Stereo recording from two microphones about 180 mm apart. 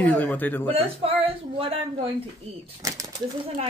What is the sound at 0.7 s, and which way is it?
Speech, 30° right (ahead or behind).